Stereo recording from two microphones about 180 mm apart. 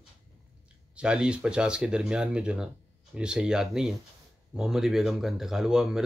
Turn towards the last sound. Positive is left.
turn(degrees=0)  # may be behind; listen again after turning